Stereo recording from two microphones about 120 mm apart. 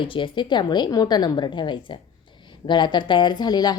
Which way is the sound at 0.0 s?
45° left (ahead or behind).